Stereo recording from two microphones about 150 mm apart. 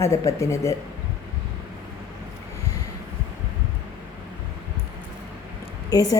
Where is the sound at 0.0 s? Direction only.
20° left (ahead or behind).